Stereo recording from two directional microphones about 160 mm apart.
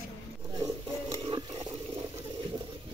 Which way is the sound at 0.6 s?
20° right (ahead or behind).